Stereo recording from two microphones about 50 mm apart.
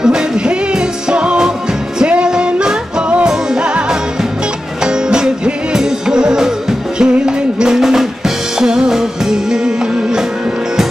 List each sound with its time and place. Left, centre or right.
0.0 s music: centre
4.8 s music: centre